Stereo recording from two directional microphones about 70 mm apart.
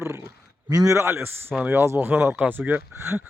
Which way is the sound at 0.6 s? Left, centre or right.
Right.